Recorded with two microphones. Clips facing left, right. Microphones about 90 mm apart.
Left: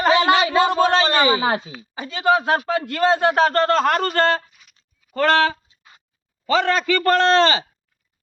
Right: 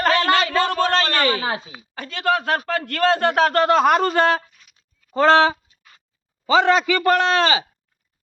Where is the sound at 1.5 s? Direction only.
30° left (ahead or behind).